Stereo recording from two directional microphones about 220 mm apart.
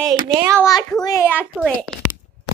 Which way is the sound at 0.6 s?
15° left (ahead or behind).